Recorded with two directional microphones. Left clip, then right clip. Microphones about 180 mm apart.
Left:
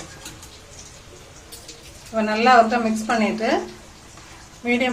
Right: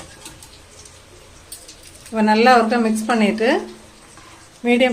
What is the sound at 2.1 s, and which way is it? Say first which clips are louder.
Speech: right 2 dB; 50° right (ahead or behind).